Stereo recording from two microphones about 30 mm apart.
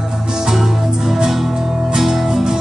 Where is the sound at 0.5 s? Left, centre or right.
Centre.